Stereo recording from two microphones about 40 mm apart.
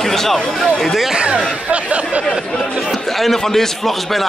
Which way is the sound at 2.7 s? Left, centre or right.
Centre.